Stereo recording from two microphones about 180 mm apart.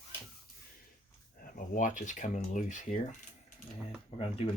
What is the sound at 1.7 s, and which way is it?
Speech, 45° left (ahead or behind).